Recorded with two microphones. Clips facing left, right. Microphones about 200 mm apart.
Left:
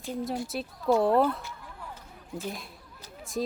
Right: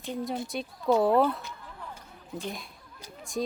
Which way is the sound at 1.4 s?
15° right (ahead or behind).